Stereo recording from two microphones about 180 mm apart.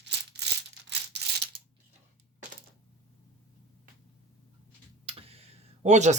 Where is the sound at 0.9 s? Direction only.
70° right (ahead or behind).